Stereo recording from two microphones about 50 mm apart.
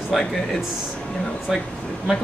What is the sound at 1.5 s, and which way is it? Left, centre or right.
Speech, centre.